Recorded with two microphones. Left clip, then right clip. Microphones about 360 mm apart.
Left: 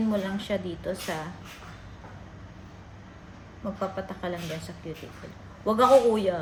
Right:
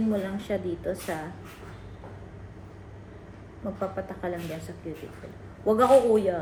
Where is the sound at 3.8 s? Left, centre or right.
Left.